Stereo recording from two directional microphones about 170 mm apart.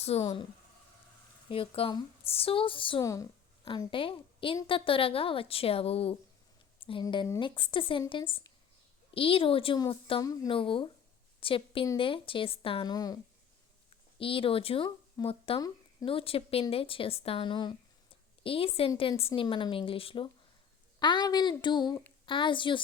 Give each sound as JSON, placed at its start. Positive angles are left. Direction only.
{"t": 0.0, "sound": "speech", "side_deg": 40}
{"t": 1.5, "sound": "a woman's voice", "side_deg": 35}
{"t": 3.0, "sound": "a woman's voice", "side_deg": 20}
{"t": 14.2, "sound": "a woman's voice", "side_deg": 30}